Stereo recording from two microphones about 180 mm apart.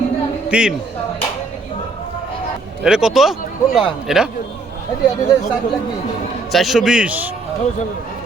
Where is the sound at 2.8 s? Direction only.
5° right (ahead or behind).